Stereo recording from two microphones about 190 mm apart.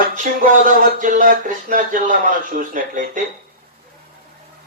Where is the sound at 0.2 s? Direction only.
45° right (ahead or behind).